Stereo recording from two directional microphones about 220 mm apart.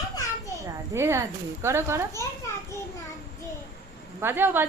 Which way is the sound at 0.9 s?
10° right (ahead or behind).